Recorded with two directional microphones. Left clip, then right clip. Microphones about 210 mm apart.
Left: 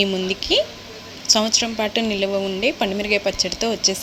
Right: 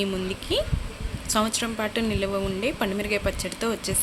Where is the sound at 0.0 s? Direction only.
15° left (ahead or behind).